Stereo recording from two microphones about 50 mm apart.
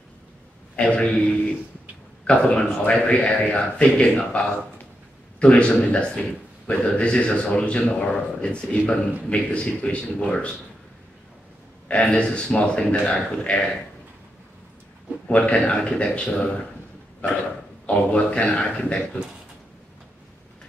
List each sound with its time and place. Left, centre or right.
0.7 s a man's voice: left
2.2 s a man's voice: left
5.4 s a man's voice: left
11.9 s a man's voice: left
15.2 s a man's voice: left
17.8 s a man's voice: left